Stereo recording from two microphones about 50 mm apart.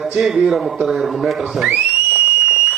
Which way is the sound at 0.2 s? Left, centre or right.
Centre.